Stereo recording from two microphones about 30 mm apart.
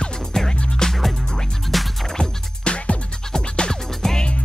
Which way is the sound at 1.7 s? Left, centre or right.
Centre.